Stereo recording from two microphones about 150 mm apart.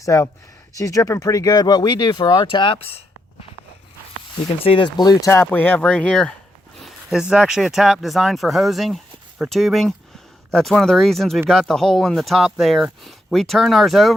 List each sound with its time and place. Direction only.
0.0 s speech: 20° left (ahead or behind); by 2.9 s 40° left (ahead or behind)
4.4 s speech: 35° left (ahead or behind); by 6.3 s 5° left (ahead or behind)
6.8 s speech: 5° right (ahead or behind)